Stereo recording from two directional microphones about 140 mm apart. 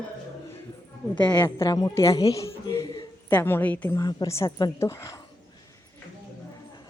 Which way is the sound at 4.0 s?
25° left (ahead or behind).